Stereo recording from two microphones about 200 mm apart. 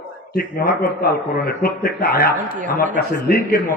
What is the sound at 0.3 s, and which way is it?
A man's voice, 50° left (ahead or behind).